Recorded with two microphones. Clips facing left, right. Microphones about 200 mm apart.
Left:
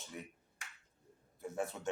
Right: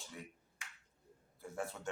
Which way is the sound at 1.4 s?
20° left (ahead or behind).